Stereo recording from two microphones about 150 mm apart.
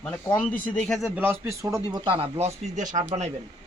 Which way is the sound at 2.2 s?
45° right (ahead or behind).